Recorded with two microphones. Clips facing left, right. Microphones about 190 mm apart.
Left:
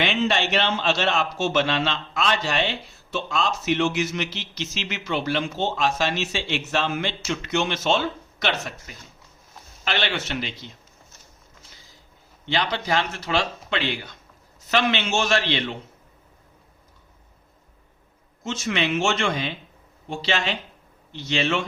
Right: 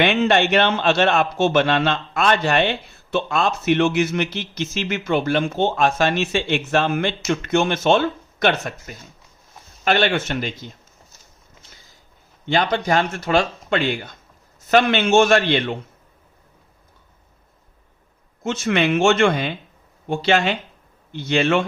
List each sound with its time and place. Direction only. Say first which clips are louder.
0.0 s a man's voice: right 6 dB; 55° right (ahead or behind)
12.5 s speech: right 5 dB; 50° right (ahead or behind)
18.4 s a man's voice: right 6 dB; 55° right (ahead or behind)